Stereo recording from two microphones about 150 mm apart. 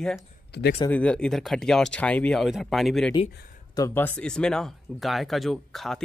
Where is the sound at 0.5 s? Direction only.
90° left.